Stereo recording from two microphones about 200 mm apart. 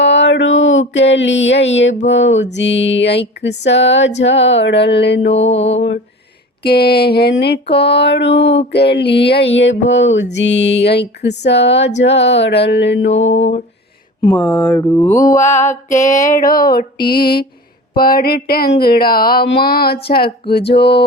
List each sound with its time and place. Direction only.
0.0 s a sound: 65° left (ahead or behind)
2.0 s music: 65° left (ahead or behind)
5.3 s music: 30° left (ahead or behind)
6.6 s music: 50° left (ahead or behind); by 13.3 s 70° left (ahead or behind)
14.3 s speech: 5° left (ahead or behind)
14.8 s mantra: 15° left (ahead or behind)
16.2 s a sound: 45° left (ahead or behind)
20.5 s music: 55° left (ahead or behind)